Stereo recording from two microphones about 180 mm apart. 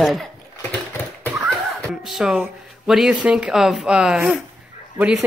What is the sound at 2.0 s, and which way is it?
Speech, centre (ahead or behind).